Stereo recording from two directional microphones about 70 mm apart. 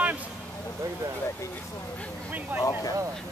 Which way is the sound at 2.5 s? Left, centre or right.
Right.